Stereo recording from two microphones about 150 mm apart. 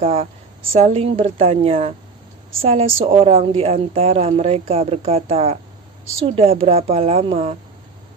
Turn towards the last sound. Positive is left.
turn(degrees=-40)  # may be behind; listen again after turning